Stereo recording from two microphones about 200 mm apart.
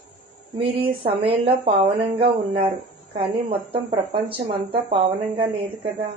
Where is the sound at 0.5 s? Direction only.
25° right (ahead or behind).